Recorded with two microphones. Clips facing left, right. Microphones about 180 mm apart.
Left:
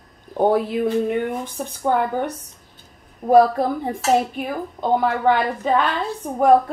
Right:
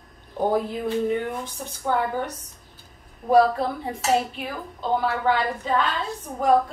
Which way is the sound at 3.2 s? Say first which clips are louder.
Left 4 dB; 45° left (ahead or behind).